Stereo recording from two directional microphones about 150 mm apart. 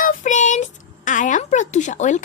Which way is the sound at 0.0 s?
55° left (ahead or behind).